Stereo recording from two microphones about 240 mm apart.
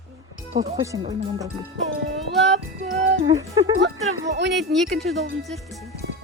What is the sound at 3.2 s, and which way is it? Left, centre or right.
Speech, centre.